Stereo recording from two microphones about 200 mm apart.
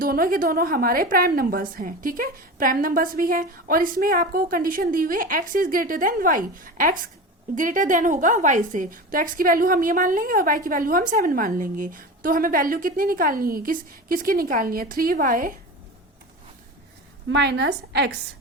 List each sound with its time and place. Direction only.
0.0 s a woman's voice: 45° right (ahead or behind)
17.2 s a woman's voice: 60° right (ahead or behind)